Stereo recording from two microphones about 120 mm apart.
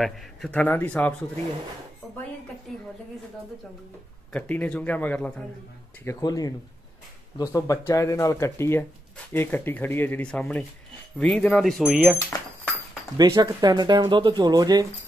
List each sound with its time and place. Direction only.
0.0 s speech: 5° left (ahead or behind)
4.3 s speech: 10° left (ahead or behind)
6.0 s speech: 30° left (ahead or behind); by 10.4 s 10° left (ahead or behind)
11.1 s a sound: 5° left (ahead or behind)
13.2 s speech: 30° right (ahead or behind)